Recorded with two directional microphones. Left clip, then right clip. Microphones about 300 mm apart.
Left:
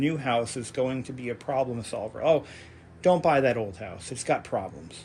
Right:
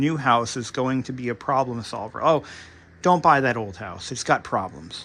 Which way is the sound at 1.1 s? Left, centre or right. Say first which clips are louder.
Right 5 dB; right.